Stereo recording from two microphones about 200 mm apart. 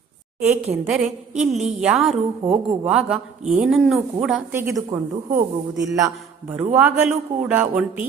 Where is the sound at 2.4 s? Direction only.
25° right (ahead or behind).